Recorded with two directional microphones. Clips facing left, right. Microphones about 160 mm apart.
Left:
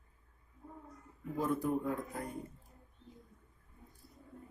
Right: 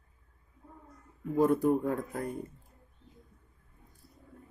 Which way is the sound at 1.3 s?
60° right (ahead or behind).